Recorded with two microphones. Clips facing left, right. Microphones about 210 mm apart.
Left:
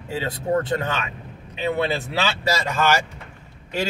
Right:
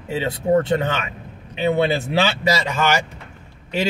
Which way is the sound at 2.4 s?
15° right (ahead or behind).